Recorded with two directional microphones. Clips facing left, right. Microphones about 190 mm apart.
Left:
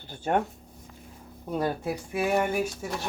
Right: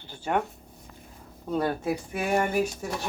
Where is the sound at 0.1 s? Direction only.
45° left (ahead or behind).